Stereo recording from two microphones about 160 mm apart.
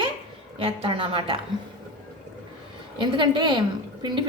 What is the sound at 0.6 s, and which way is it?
Speech, 35° right (ahead or behind).